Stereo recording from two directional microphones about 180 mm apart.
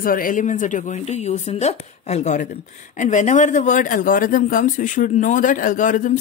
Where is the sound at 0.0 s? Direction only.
50° left (ahead or behind).